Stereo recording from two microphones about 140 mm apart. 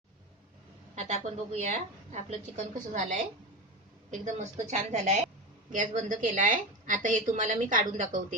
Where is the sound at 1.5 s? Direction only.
55° right (ahead or behind).